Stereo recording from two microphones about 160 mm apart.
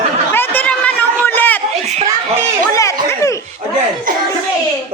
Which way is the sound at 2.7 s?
20° left (ahead or behind).